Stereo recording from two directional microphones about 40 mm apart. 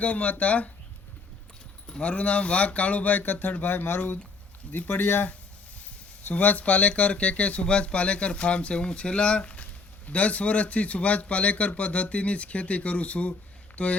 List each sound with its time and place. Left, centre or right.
0.0 s speech: left
2.0 s speech: left
4.8 s speech: left
6.3 s speech: left